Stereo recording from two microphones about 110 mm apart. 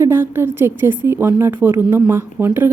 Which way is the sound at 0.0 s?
20° right (ahead or behind).